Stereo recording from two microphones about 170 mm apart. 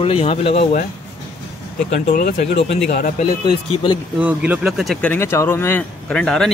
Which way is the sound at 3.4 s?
30° left (ahead or behind).